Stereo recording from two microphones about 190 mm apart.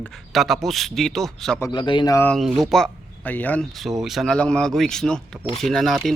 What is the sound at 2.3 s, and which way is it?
Speech, centre (ahead or behind).